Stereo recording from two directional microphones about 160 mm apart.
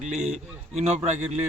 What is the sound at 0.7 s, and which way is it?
Speech, 45° right (ahead or behind).